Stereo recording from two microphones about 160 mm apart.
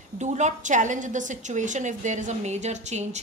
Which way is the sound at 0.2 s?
45° right (ahead or behind).